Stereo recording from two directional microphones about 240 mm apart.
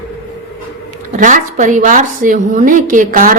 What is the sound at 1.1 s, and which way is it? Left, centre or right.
A woman's voice, right.